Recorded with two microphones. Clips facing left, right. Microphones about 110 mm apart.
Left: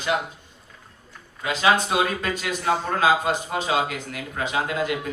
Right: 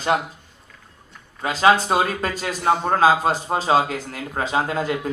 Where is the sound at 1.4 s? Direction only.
35° right (ahead or behind).